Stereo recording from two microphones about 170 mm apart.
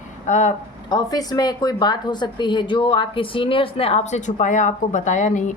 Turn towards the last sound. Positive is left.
turn(degrees=45)  # may be behind; listen again after turning